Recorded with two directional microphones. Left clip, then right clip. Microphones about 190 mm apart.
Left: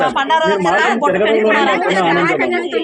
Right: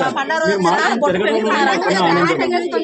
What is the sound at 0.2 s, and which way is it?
Speech, 25° right (ahead or behind).